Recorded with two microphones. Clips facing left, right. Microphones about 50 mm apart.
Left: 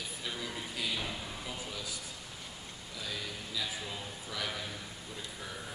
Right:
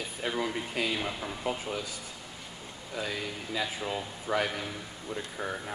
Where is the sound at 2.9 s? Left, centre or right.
Right.